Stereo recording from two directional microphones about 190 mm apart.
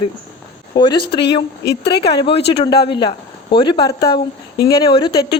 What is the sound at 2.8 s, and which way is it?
Speech, 25° left (ahead or behind).